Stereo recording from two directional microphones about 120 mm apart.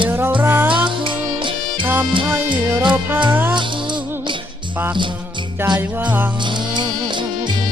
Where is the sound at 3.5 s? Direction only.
40° right (ahead or behind).